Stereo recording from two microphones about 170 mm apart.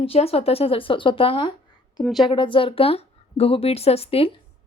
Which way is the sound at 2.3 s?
30° left (ahead or behind).